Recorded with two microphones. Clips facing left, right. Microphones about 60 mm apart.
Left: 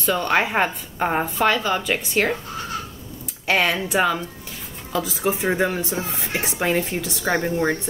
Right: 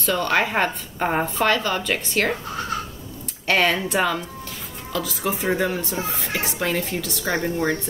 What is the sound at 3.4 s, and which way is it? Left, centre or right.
Speech, centre.